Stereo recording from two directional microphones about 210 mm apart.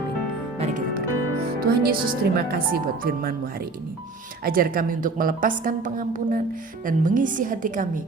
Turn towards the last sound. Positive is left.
turn(degrees=-40)  # may be behind; listen again after turning